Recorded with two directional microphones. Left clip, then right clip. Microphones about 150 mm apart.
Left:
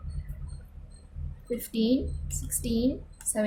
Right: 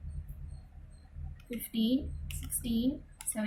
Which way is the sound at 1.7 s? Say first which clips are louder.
Left 4 dB; 55° left (ahead or behind).